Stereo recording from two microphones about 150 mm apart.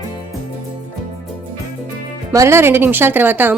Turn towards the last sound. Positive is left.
turn(degrees=-10)  # may be behind; listen again after turning